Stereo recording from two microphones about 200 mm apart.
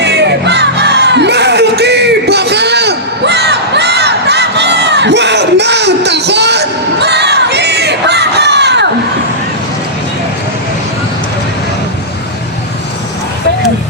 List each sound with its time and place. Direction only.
0.0 s crowd: 60° right (ahead or behind)